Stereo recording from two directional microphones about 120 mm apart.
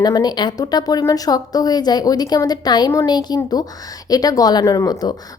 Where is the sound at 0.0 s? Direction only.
35° left (ahead or behind).